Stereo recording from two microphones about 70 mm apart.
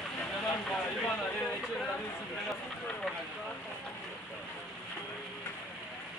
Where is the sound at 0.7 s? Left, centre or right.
Centre.